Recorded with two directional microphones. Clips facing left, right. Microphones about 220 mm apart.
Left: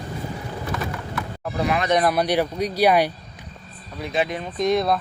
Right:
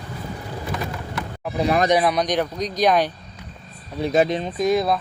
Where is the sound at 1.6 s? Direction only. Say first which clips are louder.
Right 4 dB; 40° right (ahead or behind).